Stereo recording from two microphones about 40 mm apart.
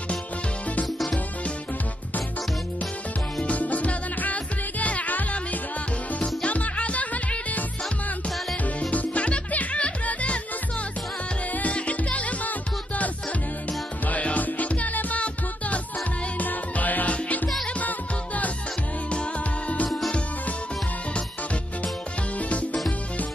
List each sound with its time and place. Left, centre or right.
3.3 s music: left
6.1 s music: left
8.7 s music: left
11.7 s music: left
14.3 s music: left
22.5 s music: left